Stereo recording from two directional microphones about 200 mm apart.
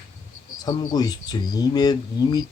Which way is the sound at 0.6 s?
20° left (ahead or behind).